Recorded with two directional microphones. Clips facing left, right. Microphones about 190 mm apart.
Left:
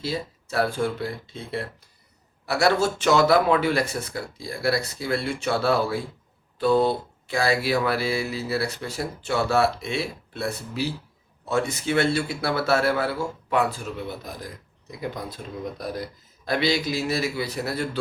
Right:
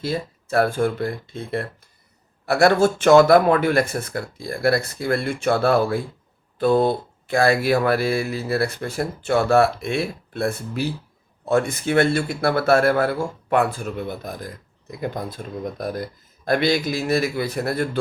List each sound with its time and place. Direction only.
0.0 s speech: 50° right (ahead or behind)